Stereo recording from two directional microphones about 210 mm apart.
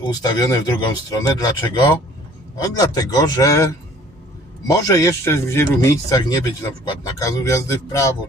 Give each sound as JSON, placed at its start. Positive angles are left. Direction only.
{"t": 0.1, "sound": "speech", "side_deg": 20}
{"t": 4.7, "sound": "speech", "side_deg": 15}